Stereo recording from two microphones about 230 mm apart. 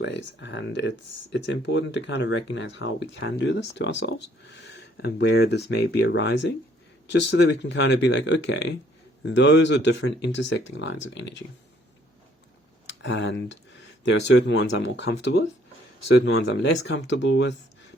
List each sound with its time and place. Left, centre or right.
0.0 s speech: left
12.9 s speech: left